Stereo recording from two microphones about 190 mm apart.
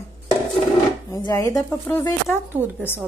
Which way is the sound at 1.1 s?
20° left (ahead or behind).